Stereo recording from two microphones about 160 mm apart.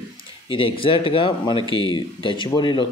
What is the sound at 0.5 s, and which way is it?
A man's voice, 35° left (ahead or behind).